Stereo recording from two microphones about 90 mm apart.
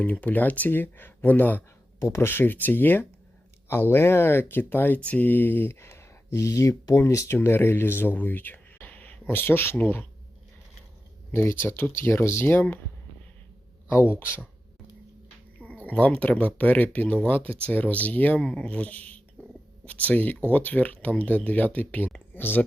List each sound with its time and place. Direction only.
0.0 s speech: 15° left (ahead or behind)
11.3 s speech: 30° left (ahead or behind)
13.9 s speech: 25° left (ahead or behind)
15.6 s speech: 15° left (ahead or behind)